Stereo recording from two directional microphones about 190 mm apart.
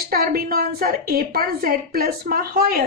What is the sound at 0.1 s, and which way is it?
A woman's voice, 50° right (ahead or behind).